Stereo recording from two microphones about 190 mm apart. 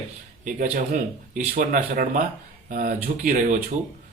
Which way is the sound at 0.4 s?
45° right (ahead or behind).